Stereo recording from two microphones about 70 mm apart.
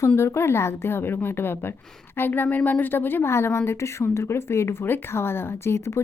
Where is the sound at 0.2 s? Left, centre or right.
Left.